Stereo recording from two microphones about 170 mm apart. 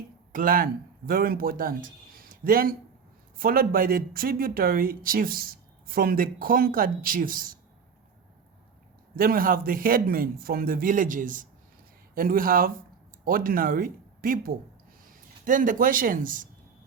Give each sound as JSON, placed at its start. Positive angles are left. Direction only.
{"t": 0.3, "sound": "speech", "side_deg": -55}
{"t": 9.1, "sound": "speech", "side_deg": -60}